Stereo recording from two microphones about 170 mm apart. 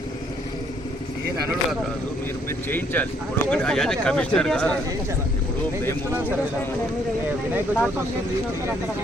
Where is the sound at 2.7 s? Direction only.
10° left (ahead or behind).